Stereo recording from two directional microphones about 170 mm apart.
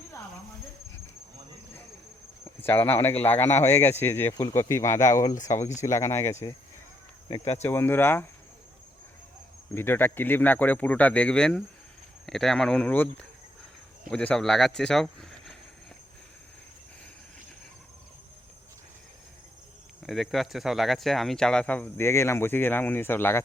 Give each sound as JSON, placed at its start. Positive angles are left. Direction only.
{"t": 2.6, "sound": "speech", "side_deg": 10}
{"t": 7.3, "sound": "speech", "side_deg": 35}
{"t": 7.6, "sound": "speech", "side_deg": 15}
{"t": 9.7, "sound": "speech", "side_deg": 10}
{"t": 20.0, "sound": "speech", "side_deg": 0}